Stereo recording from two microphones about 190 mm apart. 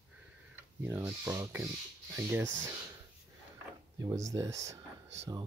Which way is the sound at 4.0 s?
20° right (ahead or behind).